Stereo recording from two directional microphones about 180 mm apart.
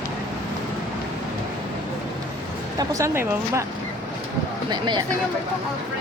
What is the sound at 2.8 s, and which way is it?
Speech, 20° right (ahead or behind).